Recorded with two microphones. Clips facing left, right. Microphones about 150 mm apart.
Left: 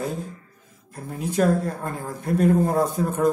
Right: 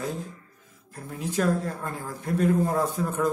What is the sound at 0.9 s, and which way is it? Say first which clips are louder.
A woman's voice: left 3 dB; 30° left (ahead or behind).